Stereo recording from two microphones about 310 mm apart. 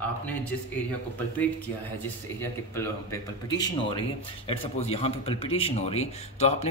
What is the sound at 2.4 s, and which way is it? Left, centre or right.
Speech, centre.